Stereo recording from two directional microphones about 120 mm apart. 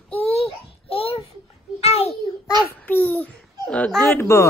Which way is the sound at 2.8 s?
15° left (ahead or behind).